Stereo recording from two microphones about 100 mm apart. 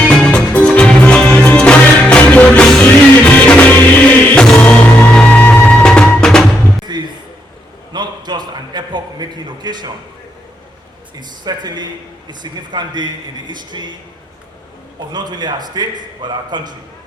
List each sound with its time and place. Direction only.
0.0 s music: 10° left (ahead or behind)
6.9 s a sound: 45° right (ahead or behind)
11.2 s a man's voice: 45° right (ahead or behind)
14.9 s a man's voice: 45° right (ahead or behind)